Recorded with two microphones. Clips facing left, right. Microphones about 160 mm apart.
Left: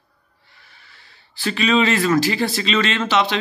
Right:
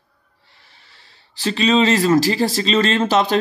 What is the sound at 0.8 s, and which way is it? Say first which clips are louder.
Speech: left 1 dB; 30° right (ahead or behind).